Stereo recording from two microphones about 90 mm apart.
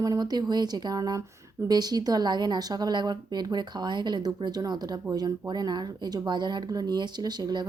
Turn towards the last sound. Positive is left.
turn(degrees=-55)  # may be behind; listen again after turning